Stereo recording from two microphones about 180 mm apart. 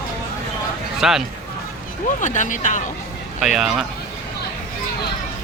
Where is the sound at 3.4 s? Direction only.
Centre (ahead or behind).